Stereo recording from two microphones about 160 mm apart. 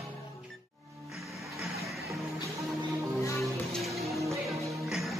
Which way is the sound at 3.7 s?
Centre (ahead or behind).